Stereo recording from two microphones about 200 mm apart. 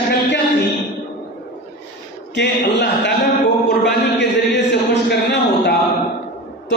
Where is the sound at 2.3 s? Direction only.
60° left (ahead or behind).